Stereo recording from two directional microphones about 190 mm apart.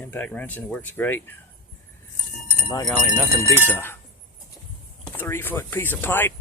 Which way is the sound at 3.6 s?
10° left (ahead or behind).